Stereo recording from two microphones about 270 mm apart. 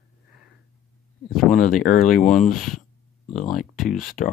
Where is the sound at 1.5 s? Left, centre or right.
Left.